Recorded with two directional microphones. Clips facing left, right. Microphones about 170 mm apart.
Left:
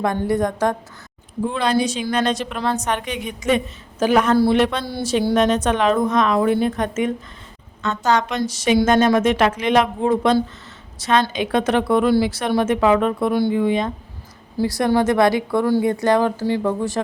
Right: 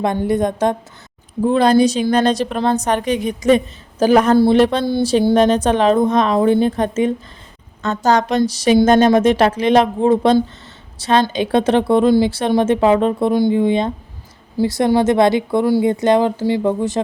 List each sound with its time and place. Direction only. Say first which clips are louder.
0.0 s a woman's voice: right 3 dB; 20° right (ahead or behind)
1.5 s a woman's voice: right 8 dB; 40° right (ahead or behind)
4.9 s a woman's voice: right 9 dB; 25° right (ahead or behind)
5.3 s a woman's voice: right 2 dB; 35° right (ahead or behind)